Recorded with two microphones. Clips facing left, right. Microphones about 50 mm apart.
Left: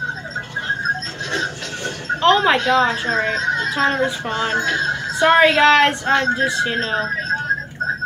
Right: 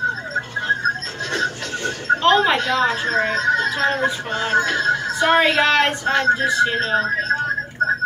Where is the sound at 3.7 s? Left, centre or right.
Centre.